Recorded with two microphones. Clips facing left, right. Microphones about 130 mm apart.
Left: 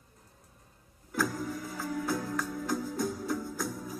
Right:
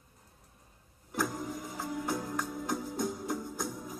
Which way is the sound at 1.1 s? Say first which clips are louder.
Left 2 dB; 20° right (ahead or behind).